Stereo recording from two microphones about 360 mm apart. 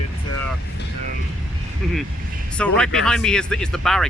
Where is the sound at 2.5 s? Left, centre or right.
Centre.